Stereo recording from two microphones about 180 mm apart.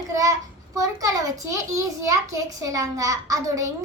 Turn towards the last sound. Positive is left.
turn(degrees=-20)  # may be behind; listen again after turning